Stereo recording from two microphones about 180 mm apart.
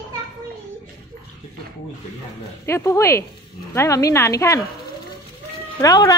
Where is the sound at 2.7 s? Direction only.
15° left (ahead or behind).